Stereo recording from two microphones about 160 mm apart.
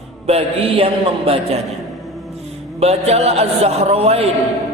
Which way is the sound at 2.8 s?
40° right (ahead or behind).